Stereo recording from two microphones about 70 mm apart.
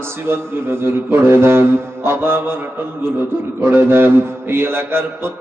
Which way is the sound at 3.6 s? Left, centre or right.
Right.